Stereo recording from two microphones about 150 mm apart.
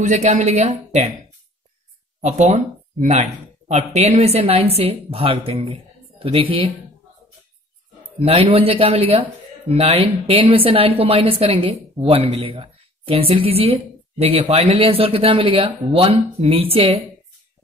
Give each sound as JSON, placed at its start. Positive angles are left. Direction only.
{"t": 0.0, "sound": "a woman's voice", "side_deg": -50}
{"t": 2.2, "sound": "speech", "side_deg": -50}
{"t": 8.2, "sound": "a woman's voice", "side_deg": -40}